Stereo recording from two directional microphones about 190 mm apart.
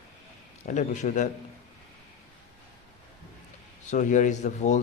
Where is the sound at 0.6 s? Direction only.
40° left (ahead or behind).